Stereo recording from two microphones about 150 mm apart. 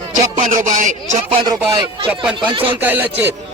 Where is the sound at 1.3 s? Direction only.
30° right (ahead or behind).